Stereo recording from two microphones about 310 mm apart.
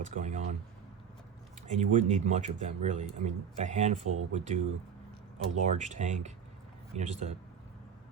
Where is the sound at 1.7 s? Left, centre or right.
Right.